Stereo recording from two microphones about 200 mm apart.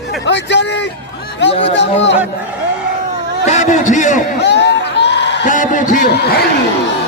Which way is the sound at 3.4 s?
35° left (ahead or behind).